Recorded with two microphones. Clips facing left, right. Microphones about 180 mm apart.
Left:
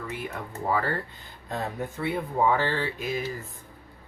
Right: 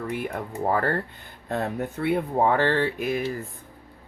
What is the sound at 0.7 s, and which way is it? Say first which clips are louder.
Speech: right 3 dB; 50° right (ahead or behind).